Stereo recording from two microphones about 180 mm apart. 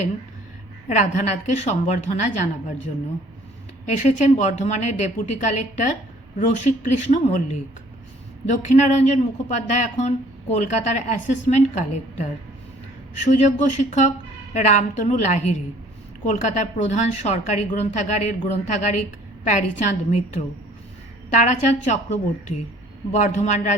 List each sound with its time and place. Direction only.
0.9 s a woman's voice: 40° left (ahead or behind)
8.4 s a woman's voice: 40° left (ahead or behind)
13.2 s a woman's voice: 40° left (ahead or behind)